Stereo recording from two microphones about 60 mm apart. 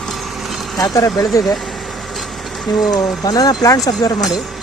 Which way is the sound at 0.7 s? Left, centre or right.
Left.